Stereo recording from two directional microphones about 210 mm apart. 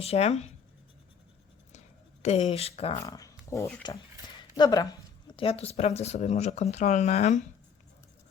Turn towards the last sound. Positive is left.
turn(degrees=35)  # may be behind; listen again after turning